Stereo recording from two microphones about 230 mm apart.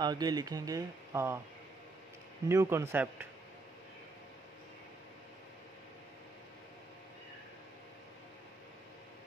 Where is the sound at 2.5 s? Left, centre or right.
Centre.